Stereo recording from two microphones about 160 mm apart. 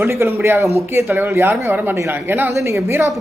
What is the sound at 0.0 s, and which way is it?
Speech, 15° right (ahead or behind).